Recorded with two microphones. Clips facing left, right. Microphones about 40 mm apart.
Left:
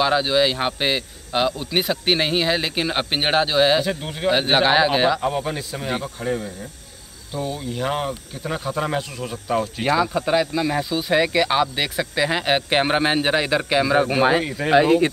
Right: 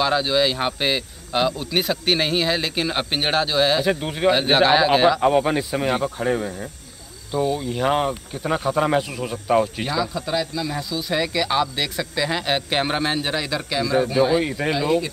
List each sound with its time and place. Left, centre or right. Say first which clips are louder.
0.0 s speech: left 1 dB; centre
3.8 s speech: right 4 dB; centre
4.3 s speech: right 1 dB; centre
5.2 s speech: right 6 dB; centre
9.8 s speech: left 5 dB; left